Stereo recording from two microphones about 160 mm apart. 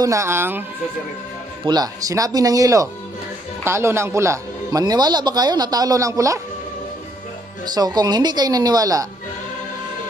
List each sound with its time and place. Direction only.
0.0 s speech: 20° right (ahead or behind)
1.7 s a man's voice: 25° right (ahead or behind)
7.6 s a man's voice: 25° right (ahead or behind)